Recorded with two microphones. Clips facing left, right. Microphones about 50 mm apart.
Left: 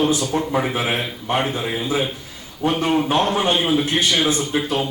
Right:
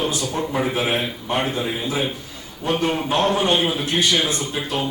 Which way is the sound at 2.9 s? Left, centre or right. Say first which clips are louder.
Left 3 dB; centre.